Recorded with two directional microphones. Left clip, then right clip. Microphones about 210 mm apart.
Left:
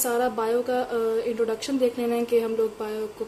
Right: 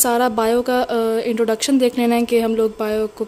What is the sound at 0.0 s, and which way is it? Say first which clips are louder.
Speech: right 7 dB; 50° right (ahead or behind).